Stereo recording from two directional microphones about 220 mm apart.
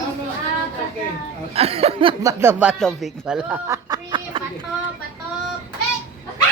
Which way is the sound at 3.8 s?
20° right (ahead or behind).